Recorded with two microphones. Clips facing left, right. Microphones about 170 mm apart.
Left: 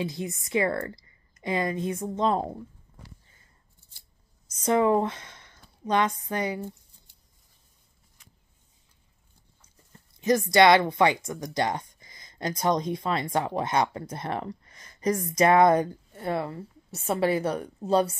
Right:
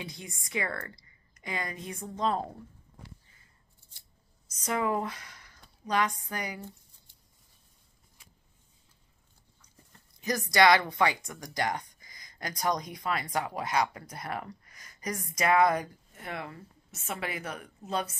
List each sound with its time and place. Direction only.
0.0 s a woman's voice: 25° left (ahead or behind)
4.5 s speech: 30° left (ahead or behind)
10.2 s speech: 25° left (ahead or behind)